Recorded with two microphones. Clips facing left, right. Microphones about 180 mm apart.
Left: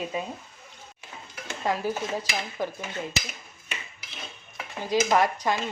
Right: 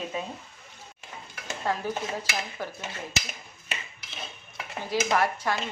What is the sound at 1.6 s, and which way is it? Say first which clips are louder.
Speech: left 2 dB; 15° left (ahead or behind).